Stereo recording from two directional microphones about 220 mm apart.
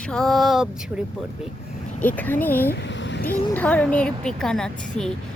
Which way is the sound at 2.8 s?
55° left (ahead or behind).